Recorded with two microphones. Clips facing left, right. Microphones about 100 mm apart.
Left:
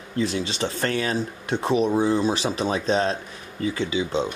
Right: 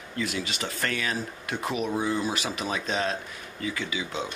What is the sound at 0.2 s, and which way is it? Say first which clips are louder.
Speech: left 6 dB; 30° left (ahead or behind).